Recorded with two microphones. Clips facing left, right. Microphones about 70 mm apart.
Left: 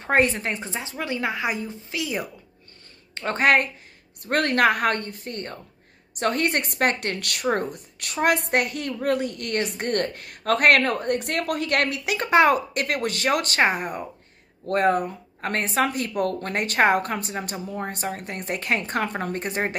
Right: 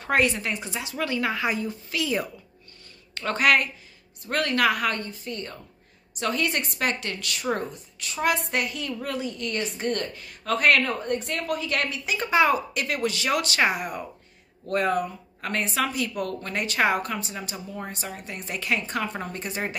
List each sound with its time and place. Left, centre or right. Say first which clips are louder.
0.0 s speech: left 2 dB; left
0.9 s a woman's voice: right 1 dB; left
3.2 s speech: left 2 dB; left
4.2 s a woman's voice: left 3 dB; left